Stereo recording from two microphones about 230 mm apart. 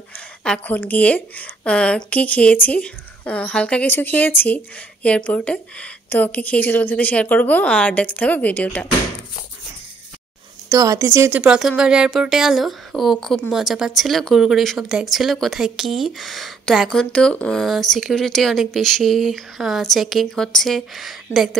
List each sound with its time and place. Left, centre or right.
0.4 s a woman's voice: centre
10.7 s speech: centre